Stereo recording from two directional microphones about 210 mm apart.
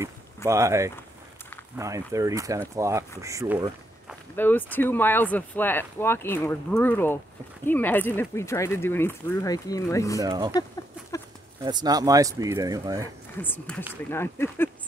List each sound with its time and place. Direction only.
0.5 s speech: 15° right (ahead or behind)
4.4 s speech: 10° left (ahead or behind)
10.2 s speech: 20° right (ahead or behind)
11.6 s speech: 20° right (ahead or behind)
13.4 s speech: 10° left (ahead or behind)